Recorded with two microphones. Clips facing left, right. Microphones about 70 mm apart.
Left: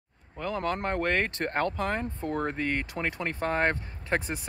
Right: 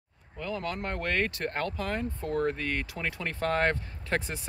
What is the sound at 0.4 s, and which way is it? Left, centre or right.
Speech, left.